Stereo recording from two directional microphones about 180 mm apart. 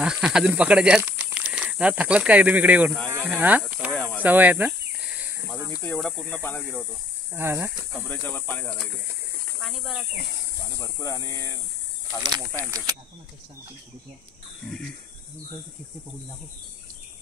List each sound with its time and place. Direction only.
0.0 s speech: 5° right (ahead or behind)
4.2 s a sound: 10° right (ahead or behind)
5.7 s speech: 10° left (ahead or behind)
7.3 s speech: 15° right (ahead or behind)
8.1 s speech: 10° left (ahead or behind)
10.8 s speech: 15° left (ahead or behind)